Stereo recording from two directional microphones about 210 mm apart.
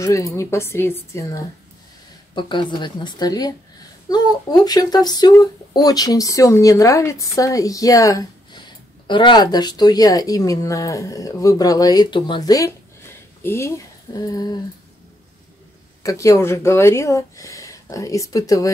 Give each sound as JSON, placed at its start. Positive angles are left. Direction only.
{"t": 0.0, "sound": "speech", "side_deg": 15}
{"t": 16.0, "sound": "speech", "side_deg": 15}